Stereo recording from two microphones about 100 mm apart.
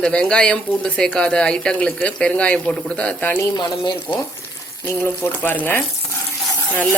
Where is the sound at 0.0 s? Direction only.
10° left (ahead or behind).